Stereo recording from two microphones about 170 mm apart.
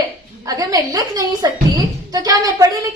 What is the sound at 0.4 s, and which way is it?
A woman's voice, 20° right (ahead or behind).